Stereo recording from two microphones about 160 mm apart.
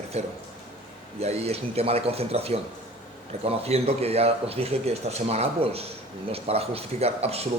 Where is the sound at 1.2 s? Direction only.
40° right (ahead or behind).